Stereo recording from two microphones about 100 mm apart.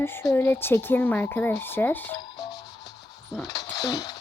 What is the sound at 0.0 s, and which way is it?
Speech, 25° left (ahead or behind).